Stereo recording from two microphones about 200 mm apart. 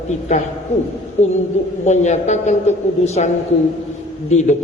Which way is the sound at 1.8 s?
35° left (ahead or behind).